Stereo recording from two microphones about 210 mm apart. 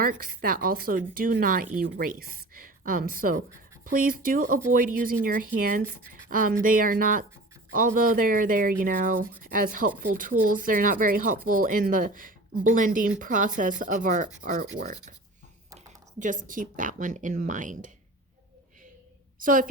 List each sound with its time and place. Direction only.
0.0 s speech: 40° right (ahead or behind)
16.1 s speech: 40° right (ahead or behind)
19.4 s a woman's voice: 40° right (ahead or behind)